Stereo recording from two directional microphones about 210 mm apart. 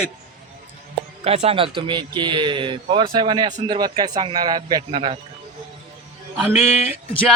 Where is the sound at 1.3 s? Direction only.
30° right (ahead or behind).